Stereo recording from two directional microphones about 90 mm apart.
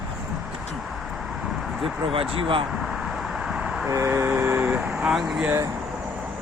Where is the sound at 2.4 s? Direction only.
75° right (ahead or behind).